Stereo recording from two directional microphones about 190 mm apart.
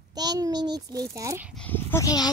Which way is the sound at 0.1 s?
20° right (ahead or behind).